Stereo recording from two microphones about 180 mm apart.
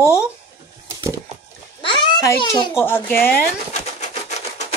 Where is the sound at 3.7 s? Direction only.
40° left (ahead or behind).